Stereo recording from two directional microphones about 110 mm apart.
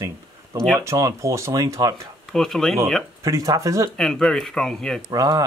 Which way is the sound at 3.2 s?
30° right (ahead or behind).